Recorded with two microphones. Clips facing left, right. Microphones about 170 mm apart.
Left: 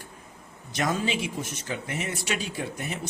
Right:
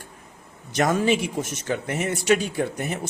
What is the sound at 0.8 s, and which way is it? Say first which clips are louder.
Speech: right 6 dB; 60° right (ahead or behind).